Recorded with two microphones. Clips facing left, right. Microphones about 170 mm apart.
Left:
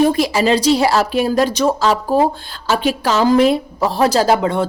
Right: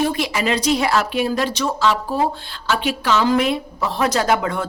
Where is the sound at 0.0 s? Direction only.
40° left (ahead or behind).